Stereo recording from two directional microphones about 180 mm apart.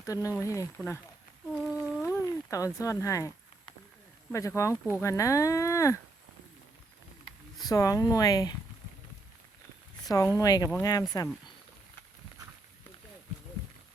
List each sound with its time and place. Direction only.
0.0 s speech: 20° left (ahead or behind)
2.0 s a sound: 15° left (ahead or behind)
4.3 s speech: 15° left (ahead or behind)
7.6 s speech: 20° left (ahead or behind)
10.1 s speech: 15° left (ahead or behind)